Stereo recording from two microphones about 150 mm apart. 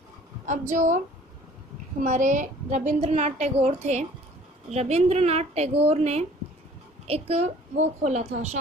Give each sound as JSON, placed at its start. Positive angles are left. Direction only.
{"t": 0.5, "sound": "speech", "side_deg": -55}
{"t": 2.0, "sound": "a woman's voice", "side_deg": -55}